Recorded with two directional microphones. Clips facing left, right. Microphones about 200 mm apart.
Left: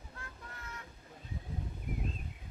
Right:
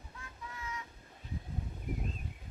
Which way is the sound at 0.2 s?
60° left (ahead or behind).